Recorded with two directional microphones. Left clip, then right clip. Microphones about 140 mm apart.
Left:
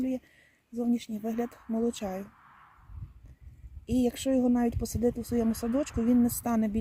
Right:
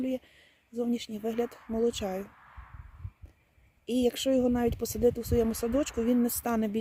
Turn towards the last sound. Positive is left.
turn(degrees=-35)  # may be behind; listen again after turning